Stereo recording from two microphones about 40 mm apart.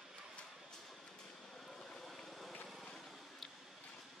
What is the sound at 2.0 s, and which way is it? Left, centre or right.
Vehicle, centre.